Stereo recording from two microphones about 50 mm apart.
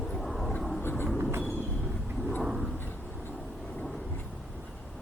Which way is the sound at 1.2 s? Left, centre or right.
Right.